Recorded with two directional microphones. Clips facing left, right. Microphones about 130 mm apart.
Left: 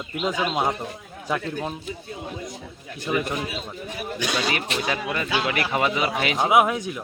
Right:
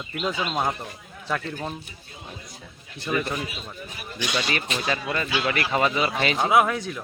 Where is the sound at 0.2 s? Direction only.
15° left (ahead or behind).